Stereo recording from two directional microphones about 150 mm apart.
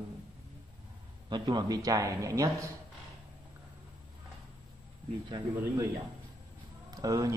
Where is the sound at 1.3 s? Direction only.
30° right (ahead or behind).